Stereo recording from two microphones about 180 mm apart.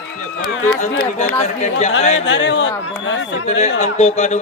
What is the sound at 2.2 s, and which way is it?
A man's voice, 90° left.